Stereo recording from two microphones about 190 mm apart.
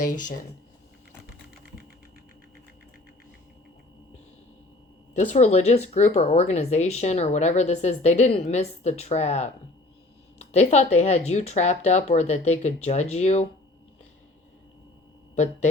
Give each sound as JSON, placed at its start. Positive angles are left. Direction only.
{"t": 0.1, "sound": "speech", "side_deg": 40}
{"t": 5.1, "sound": "speech", "side_deg": 35}